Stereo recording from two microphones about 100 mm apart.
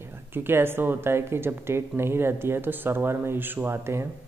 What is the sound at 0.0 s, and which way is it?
Speech, 20° right (ahead or behind).